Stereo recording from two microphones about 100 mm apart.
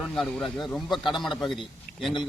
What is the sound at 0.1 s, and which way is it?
Speech, 5° left (ahead or behind).